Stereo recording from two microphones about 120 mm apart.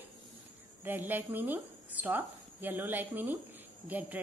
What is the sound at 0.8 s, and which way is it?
A woman's voice, 15° right (ahead or behind).